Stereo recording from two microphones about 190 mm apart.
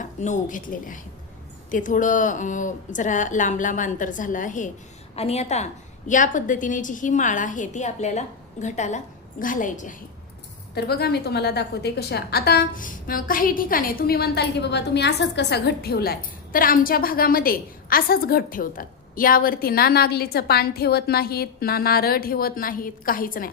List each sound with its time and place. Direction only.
0.0 s a woman's voice: 40° left (ahead or behind)
10.8 s a woman's voice: 55° left (ahead or behind)